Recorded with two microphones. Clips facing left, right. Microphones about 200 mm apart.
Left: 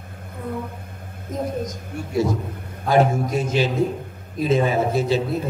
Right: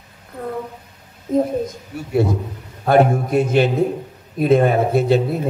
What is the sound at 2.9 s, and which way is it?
A man's voice, 60° right (ahead or behind).